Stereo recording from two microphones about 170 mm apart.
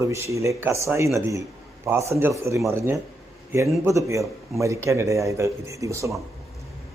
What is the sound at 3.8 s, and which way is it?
A man's voice, 15° right (ahead or behind).